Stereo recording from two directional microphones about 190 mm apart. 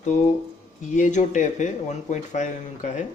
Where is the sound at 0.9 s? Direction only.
40° left (ahead or behind).